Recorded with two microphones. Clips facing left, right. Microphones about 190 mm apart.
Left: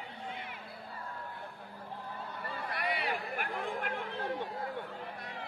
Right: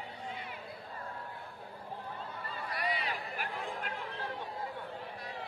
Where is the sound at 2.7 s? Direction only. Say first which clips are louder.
Left 1 dB; 55° left (ahead or behind).